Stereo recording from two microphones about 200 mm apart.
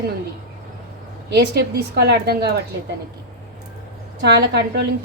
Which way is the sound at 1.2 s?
55° right (ahead or behind).